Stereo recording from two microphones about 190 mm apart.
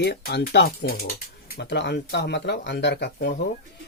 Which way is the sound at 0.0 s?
60° left (ahead or behind).